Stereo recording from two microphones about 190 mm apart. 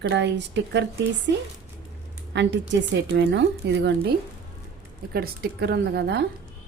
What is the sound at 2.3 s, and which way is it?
A woman's voice, 70° right (ahead or behind).